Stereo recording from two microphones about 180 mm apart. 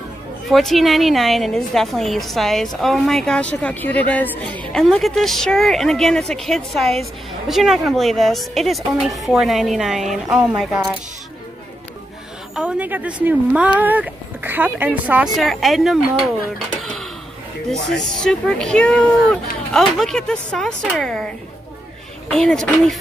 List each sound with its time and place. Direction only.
0.5 s a woman's voice: centre (ahead or behind)
12.5 s a woman's voice: 5° right (ahead or behind)
22.3 s a woman's voice: 5° left (ahead or behind)